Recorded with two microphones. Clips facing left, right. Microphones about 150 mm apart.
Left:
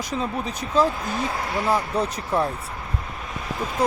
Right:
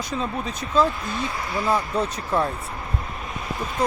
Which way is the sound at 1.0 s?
55° left (ahead or behind).